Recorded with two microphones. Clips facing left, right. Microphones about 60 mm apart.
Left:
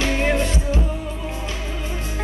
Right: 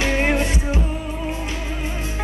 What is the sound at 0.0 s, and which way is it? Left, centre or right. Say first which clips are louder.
Music: right 1 dB; right.